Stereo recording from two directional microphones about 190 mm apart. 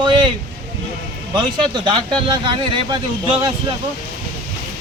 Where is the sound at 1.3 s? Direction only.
25° right (ahead or behind).